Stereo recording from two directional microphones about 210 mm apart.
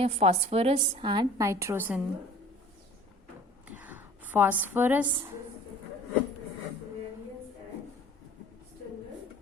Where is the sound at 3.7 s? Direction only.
10° right (ahead or behind).